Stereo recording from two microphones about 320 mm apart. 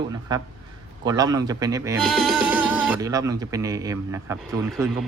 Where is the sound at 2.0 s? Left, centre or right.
Centre.